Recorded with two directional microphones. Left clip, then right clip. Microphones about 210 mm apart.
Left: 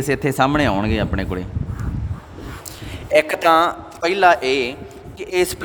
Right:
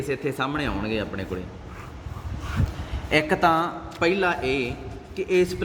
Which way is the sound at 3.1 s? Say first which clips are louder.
Left 6 dB; 45° left (ahead or behind).